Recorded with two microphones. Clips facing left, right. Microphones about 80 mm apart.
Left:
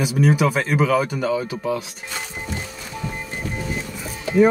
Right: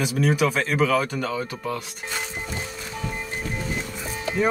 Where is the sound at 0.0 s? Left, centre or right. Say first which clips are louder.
Left 3 dB; centre.